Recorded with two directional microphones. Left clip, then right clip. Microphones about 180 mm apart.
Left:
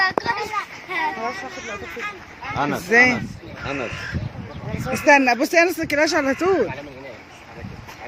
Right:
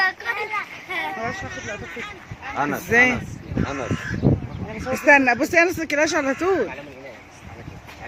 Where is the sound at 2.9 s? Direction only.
Centre (ahead or behind).